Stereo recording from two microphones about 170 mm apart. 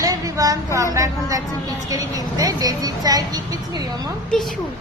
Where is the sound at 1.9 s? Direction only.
20° right (ahead or behind).